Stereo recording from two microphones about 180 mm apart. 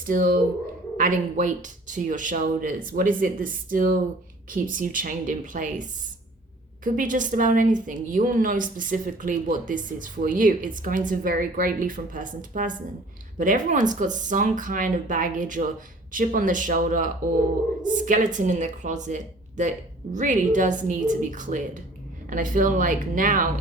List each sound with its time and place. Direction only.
0.0 s a woman's voice: 50° right (ahead or behind)